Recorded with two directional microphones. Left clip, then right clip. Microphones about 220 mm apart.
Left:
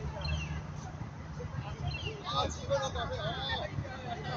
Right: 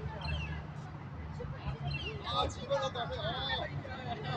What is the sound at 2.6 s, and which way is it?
Speech, 55° right (ahead or behind).